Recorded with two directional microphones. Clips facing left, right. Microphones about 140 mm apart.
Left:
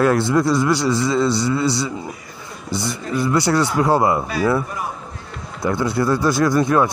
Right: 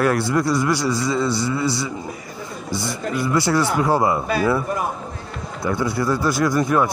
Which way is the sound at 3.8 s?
25° left (ahead or behind).